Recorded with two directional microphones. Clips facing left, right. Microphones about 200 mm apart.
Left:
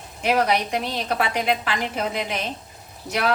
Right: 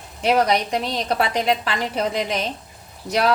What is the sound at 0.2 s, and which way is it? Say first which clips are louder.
Speech: right 2 dB; 35° right (ahead or behind).